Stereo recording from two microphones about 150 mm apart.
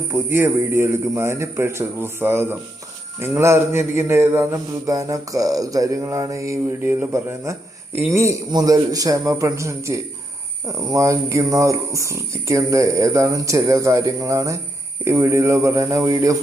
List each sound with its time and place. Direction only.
0.1 s a man's voice: 15° right (ahead or behind)